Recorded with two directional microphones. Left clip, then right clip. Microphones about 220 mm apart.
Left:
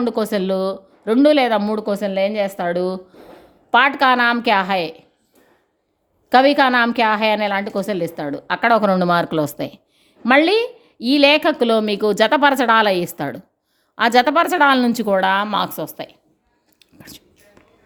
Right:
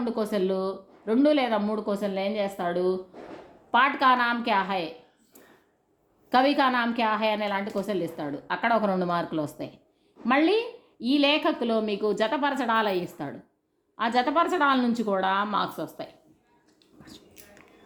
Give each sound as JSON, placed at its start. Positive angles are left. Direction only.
{"t": 0.0, "sound": "a woman's voice", "side_deg": 50}
{"t": 6.3, "sound": "a woman's voice", "side_deg": 50}